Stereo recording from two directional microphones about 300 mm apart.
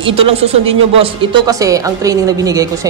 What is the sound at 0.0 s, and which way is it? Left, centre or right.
A woman's voice, centre.